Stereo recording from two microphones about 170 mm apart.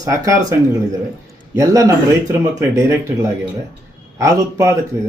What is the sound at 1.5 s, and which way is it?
Speech, 20° right (ahead or behind).